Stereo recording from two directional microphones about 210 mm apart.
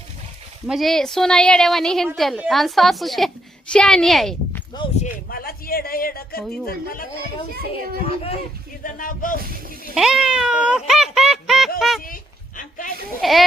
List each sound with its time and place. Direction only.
0.7 s a woman's voice: centre (ahead or behind)
5.3 s a man's voice: 45° left (ahead or behind)
7.7 s speech: 30° left (ahead or behind)
8.8 s speech: 40° left (ahead or behind)
9.9 s meow: 5° right (ahead or behind)
11.8 s a woman's voice: centre (ahead or behind)
12.0 s a sound: 40° left (ahead or behind)
13.2 s a woman's voice: centre (ahead or behind)